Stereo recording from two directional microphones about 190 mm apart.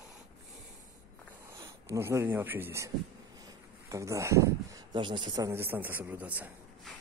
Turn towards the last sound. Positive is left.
turn(degrees=-10)  # may be behind; listen again after turning